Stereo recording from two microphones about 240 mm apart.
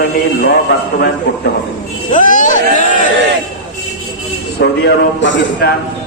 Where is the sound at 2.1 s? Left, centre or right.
Left.